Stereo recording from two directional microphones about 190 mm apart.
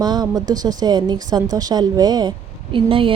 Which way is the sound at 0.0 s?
20° right (ahead or behind).